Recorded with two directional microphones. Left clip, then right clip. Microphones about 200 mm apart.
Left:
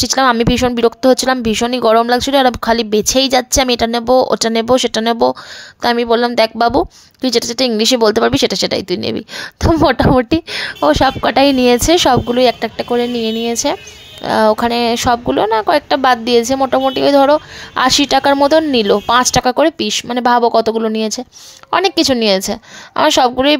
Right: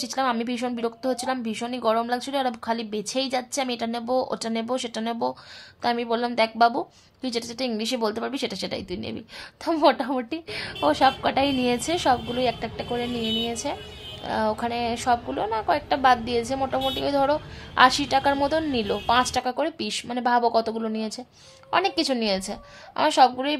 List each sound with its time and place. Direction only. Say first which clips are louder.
0.0 s a woman's voice: left 13 dB; 45° left (ahead or behind)